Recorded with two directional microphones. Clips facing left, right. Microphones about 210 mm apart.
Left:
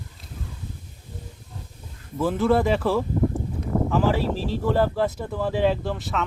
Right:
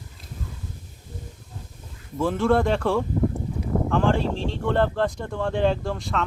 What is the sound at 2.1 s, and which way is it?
Speech, centre (ahead or behind).